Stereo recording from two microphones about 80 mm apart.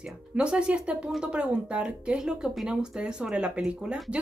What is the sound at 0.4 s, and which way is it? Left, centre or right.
Speech, centre.